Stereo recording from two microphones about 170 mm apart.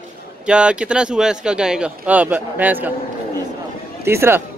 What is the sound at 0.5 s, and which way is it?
Speech, 5° right (ahead or behind).